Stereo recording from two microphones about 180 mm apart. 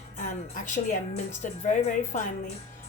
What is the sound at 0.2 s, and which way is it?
Speech, 45° left (ahead or behind).